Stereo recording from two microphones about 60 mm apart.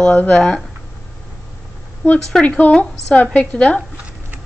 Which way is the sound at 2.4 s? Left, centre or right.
Centre.